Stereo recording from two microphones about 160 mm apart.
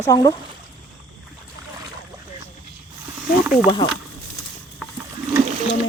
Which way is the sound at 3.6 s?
30° left (ahead or behind).